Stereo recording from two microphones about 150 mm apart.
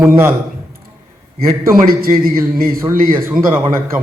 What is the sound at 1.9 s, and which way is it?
Speech, 75° right (ahead or behind).